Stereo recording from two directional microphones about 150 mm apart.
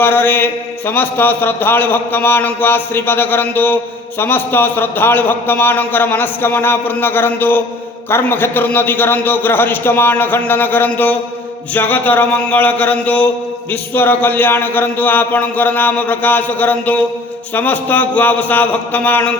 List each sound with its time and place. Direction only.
0.0 s a man's voice: 15° left (ahead or behind)